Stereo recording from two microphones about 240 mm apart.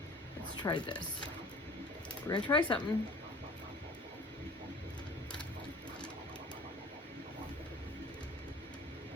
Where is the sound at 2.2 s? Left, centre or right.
Centre.